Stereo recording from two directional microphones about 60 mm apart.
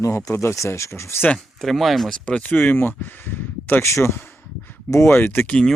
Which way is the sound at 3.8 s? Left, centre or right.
Left.